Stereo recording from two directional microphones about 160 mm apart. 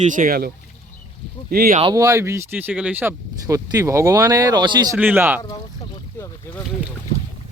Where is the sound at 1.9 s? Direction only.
20° right (ahead or behind).